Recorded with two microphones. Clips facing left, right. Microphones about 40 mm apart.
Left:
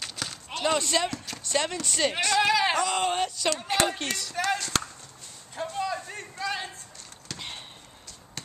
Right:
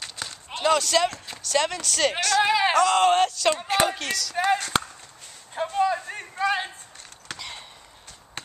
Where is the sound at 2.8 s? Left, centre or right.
Right.